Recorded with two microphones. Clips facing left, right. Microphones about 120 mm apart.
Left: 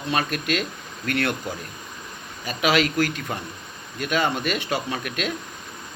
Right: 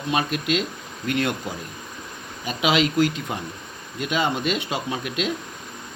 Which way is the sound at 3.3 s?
10° right (ahead or behind).